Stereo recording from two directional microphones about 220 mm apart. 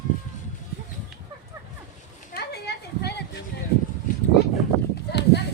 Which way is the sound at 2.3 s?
50° left (ahead or behind).